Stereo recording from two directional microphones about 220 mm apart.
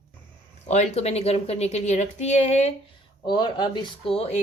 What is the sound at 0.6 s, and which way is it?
Speech, 30° left (ahead or behind).